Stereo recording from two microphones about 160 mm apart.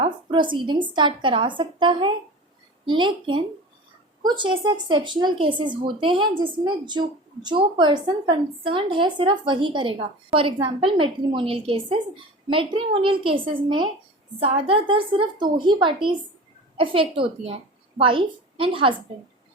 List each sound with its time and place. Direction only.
0.0 s a woman's voice: 30° right (ahead or behind)